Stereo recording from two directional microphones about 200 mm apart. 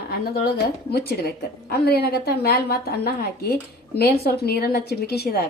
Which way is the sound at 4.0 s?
50° left (ahead or behind).